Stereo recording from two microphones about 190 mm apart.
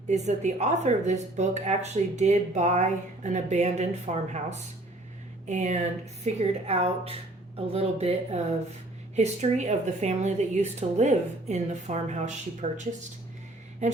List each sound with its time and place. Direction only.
0.1 s a woman's voice: 35° right (ahead or behind)